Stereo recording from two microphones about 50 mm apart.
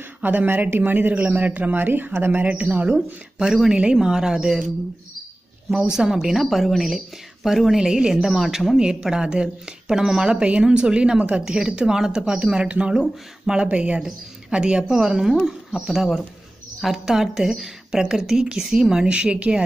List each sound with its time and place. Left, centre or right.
0.2 s speech: right
3.7 s a woman's voice: centre
5.8 s speech: centre
7.8 s a woman's voice: centre